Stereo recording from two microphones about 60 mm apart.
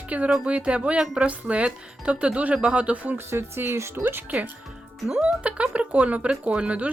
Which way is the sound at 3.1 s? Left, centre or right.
Right.